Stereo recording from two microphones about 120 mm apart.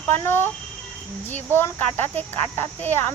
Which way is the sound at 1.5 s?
15° left (ahead or behind).